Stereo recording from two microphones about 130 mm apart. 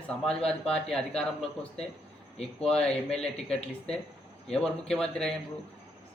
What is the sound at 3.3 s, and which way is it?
Speech, 55° left (ahead or behind).